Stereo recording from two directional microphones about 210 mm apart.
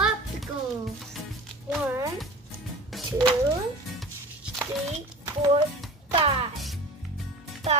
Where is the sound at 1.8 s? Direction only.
10° right (ahead or behind).